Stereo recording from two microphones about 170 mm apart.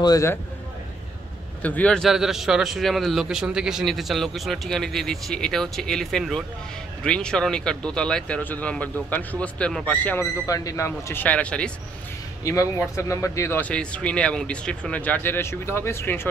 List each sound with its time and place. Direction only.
0.0 s speech: 20° left (ahead or behind)
1.6 s speech: 10° left (ahead or behind)
12.4 s speech: 15° left (ahead or behind)